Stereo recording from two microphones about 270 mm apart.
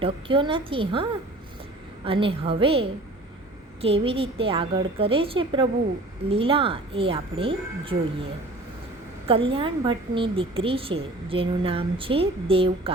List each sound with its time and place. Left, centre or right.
0.0 s a woman's voice: centre
2.0 s a woman's voice: centre